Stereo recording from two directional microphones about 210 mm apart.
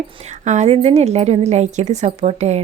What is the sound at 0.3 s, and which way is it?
A woman's voice, 35° right (ahead or behind).